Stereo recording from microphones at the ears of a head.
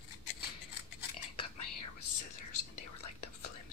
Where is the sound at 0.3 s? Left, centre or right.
Left.